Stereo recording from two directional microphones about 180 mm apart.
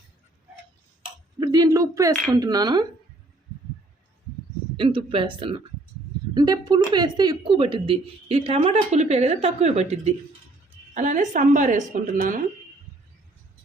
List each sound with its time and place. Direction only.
1.4 s speech: 25° right (ahead or behind)
4.8 s a woman's voice: 30° right (ahead or behind); by 12.4 s 50° right (ahead or behind)